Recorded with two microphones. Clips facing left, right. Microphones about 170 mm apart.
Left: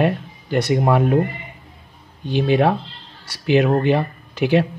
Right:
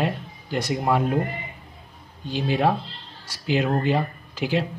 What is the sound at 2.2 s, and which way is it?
Speech, 65° left (ahead or behind).